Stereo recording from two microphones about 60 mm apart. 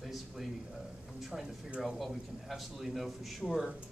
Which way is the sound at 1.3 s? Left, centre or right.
Centre.